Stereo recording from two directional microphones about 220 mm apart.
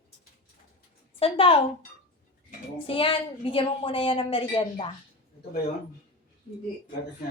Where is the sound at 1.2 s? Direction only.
25° left (ahead or behind).